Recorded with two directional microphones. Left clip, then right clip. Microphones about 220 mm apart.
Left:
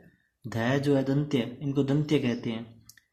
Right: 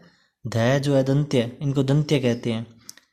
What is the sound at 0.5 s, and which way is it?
Speech, 40° right (ahead or behind).